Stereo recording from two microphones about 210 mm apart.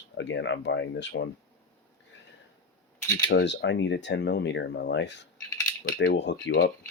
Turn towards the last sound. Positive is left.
turn(degrees=60)  # may be behind; listen again after turning